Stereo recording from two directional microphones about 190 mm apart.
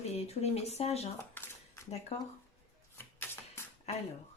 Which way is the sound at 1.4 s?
10° left (ahead or behind).